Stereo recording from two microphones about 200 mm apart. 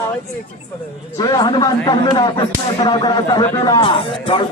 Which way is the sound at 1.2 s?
20° left (ahead or behind).